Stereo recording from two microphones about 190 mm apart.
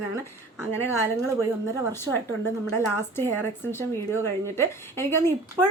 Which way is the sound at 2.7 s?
15° left (ahead or behind).